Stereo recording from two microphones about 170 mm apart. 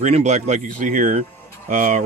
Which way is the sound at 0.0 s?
40° right (ahead or behind).